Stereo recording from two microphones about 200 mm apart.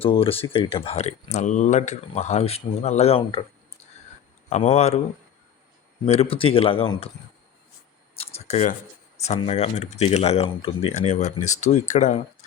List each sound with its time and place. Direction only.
0.0 s speech: 30° left (ahead or behind)
4.4 s speech: 35° left (ahead or behind)
6.1 s speech: 30° left (ahead or behind)
8.1 s a sound: 30° left (ahead or behind)
9.1 s speech: 35° left (ahead or behind)